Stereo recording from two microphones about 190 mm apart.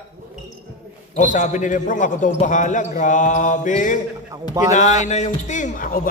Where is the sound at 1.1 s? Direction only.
40° left (ahead or behind).